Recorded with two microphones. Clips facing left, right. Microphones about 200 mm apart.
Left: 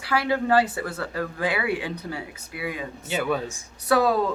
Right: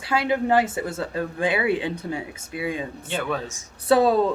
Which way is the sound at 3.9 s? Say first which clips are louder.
Right 3 dB; 25° right (ahead or behind).